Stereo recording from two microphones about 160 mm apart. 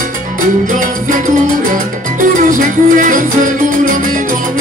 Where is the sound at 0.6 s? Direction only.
55° right (ahead or behind).